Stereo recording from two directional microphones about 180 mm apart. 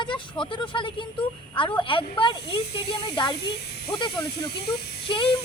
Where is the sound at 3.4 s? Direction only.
65° left (ahead or behind).